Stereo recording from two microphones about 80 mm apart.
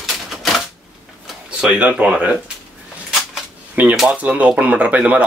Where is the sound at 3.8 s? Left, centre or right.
Right.